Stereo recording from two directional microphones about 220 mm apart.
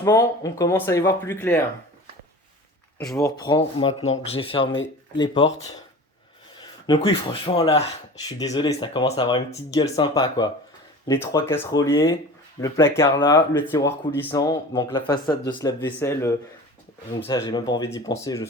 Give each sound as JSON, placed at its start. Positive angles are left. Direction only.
{"t": 0.0, "sound": "speech", "side_deg": 15}
{"t": 3.2, "sound": "speech", "side_deg": 15}
{"t": 6.6, "sound": "speech", "side_deg": 20}